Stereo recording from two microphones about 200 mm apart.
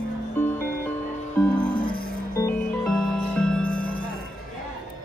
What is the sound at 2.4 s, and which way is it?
Music, 5° left (ahead or behind).